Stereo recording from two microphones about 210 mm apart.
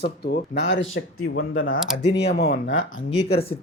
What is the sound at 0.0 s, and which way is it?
Speech, 55° left (ahead or behind).